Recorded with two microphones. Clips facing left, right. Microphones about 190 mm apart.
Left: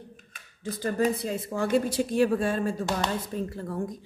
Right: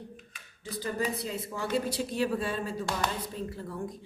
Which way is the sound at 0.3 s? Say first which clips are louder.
Left 8 dB; 50° left (ahead or behind).